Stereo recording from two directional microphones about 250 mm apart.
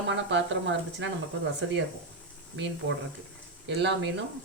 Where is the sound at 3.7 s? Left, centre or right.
Right.